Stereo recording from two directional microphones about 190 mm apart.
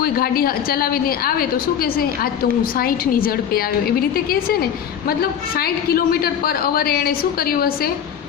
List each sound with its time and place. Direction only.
0.0 s a woman's voice: 50° left (ahead or behind)